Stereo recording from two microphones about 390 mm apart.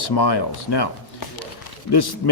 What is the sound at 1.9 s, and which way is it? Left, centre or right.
Speech, left.